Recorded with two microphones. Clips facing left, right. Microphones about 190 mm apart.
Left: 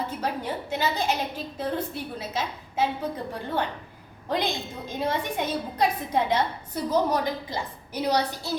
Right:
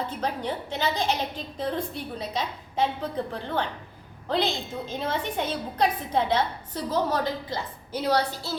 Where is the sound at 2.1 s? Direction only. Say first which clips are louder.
Right 1 dB; 5° left (ahead or behind).